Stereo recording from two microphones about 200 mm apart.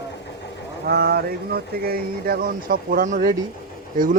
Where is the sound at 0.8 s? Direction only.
50° right (ahead or behind).